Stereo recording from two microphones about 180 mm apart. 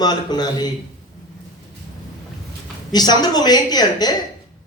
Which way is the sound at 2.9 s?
25° left (ahead or behind).